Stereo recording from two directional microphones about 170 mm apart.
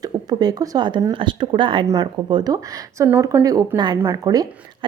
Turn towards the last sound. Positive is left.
turn(degrees=-20)  # may be behind; listen again after turning